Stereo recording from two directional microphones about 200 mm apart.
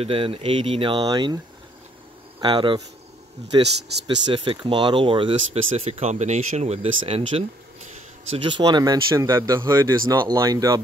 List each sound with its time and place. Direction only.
0.0 s speech: 25° right (ahead or behind)
2.4 s speech: 25° right (ahead or behind)
3.6 s speech: 60° right (ahead or behind)
4.3 s speech: 25° right (ahead or behind)